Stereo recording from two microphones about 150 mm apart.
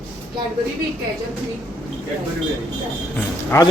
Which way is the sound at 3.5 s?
20° left (ahead or behind).